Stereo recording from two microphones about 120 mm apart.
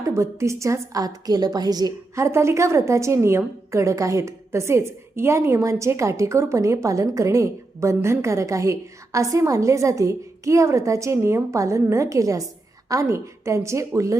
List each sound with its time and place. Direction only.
0.1 s a woman's voice: 25° right (ahead or behind)